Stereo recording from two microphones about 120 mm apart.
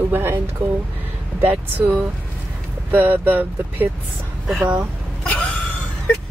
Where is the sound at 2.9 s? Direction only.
15° right (ahead or behind).